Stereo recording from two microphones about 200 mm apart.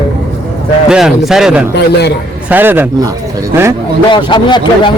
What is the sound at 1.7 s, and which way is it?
Speech, 55° left (ahead or behind).